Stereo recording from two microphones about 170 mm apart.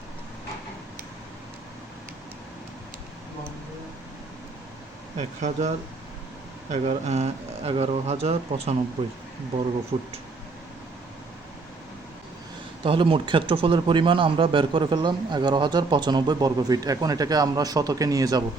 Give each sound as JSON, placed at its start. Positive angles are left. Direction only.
{"t": 5.4, "sound": "speech", "side_deg": -45}
{"t": 9.9, "sound": "speech", "side_deg": -30}
{"t": 12.8, "sound": "speech", "side_deg": -30}